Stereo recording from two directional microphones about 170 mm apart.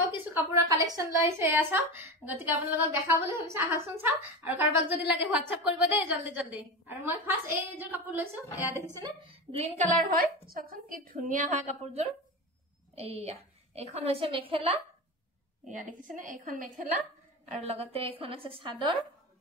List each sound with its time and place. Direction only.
0.1 s a woman's voice: 20° right (ahead or behind)
9.0 s a woman's voice: 35° right (ahead or behind)
15.6 s a woman's voice: 50° right (ahead or behind)
17.5 s a woman's voice: 35° right (ahead or behind)